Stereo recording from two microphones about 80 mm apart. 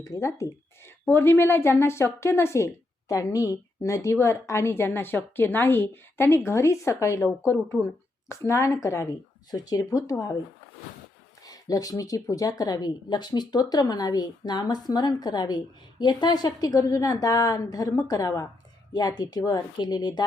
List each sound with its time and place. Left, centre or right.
0.0 s a woman's voice: left
9.5 s speech: left
11.4 s speech: left
18.9 s a woman's voice: left